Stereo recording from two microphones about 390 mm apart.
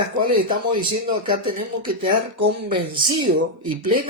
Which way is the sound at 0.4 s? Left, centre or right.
Centre.